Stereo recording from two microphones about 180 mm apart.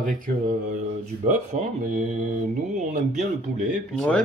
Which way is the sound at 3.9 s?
5° left (ahead or behind).